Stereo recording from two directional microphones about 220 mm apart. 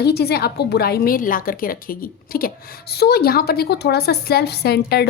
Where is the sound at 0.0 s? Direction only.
45° left (ahead or behind).